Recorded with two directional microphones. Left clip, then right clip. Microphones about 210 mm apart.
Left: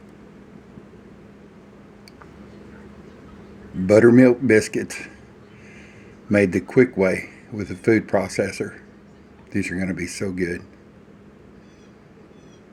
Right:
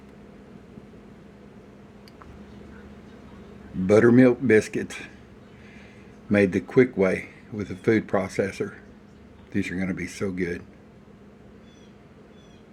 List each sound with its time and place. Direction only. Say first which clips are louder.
3.8 s speech: left 4 dB; 15° left (ahead or behind)
6.3 s speech: left 3 dB; 15° left (ahead or behind)